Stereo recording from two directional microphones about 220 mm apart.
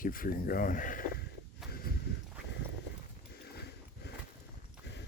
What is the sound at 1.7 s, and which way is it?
Walk, 45° left (ahead or behind).